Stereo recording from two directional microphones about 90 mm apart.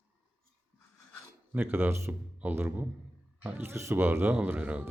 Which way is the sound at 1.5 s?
25° right (ahead or behind).